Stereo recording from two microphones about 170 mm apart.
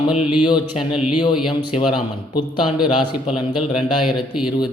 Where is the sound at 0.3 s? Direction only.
25° left (ahead or behind).